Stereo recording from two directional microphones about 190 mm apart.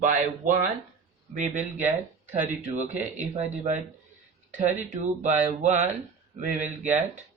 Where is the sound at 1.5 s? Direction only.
10° right (ahead or behind).